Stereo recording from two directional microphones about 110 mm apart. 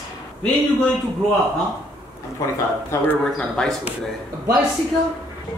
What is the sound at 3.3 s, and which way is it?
Speech, 5° left (ahead or behind).